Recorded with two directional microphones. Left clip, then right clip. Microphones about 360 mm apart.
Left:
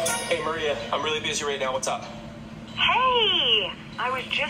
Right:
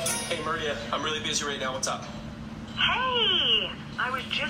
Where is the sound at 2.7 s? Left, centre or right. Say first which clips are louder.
Left 4 dB; centre.